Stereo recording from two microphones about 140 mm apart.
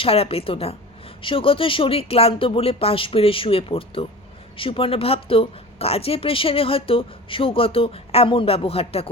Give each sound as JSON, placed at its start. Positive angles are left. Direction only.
{"t": 0.0, "sound": "a woman's voice", "side_deg": 45}